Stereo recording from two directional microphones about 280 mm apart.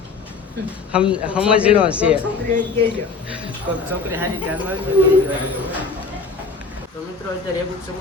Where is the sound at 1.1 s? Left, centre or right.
Centre.